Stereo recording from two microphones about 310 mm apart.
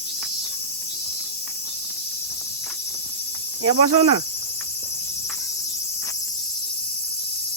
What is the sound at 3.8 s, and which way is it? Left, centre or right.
Speech, right.